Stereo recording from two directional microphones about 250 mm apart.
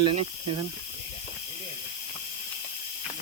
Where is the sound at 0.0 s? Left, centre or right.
Right.